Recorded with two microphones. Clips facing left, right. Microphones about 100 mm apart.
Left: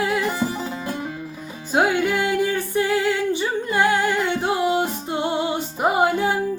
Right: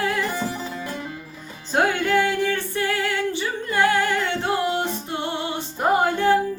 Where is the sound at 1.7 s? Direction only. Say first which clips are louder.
Even; 10° left (ahead or behind).